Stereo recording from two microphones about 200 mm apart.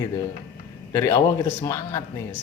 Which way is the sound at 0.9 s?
15° left (ahead or behind).